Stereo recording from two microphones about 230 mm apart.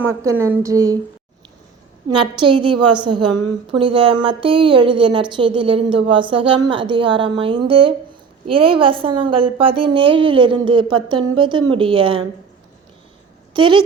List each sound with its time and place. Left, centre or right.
0.0 s a woman's voice: centre
2.3 s a woman's voice: right
13.5 s a woman's voice: right